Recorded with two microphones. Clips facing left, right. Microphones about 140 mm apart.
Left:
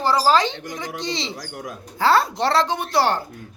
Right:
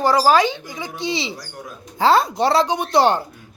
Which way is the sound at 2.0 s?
15° right (ahead or behind).